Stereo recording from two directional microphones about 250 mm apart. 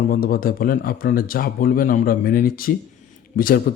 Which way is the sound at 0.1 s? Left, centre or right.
Left.